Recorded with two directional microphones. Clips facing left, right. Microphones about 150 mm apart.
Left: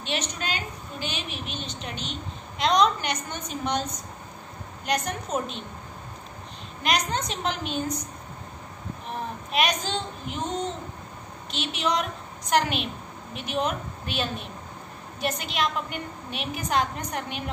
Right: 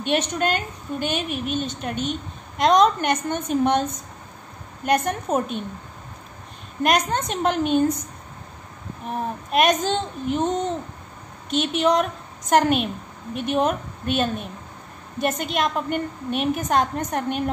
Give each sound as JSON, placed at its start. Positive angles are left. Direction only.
{"t": 0.0, "sound": "a woman's voice", "side_deg": -55}
{"t": 6.8, "sound": "a woman's voice", "side_deg": -50}
{"t": 9.5, "sound": "a woman's voice", "side_deg": -50}
{"t": 11.5, "sound": "a woman's voice", "side_deg": -50}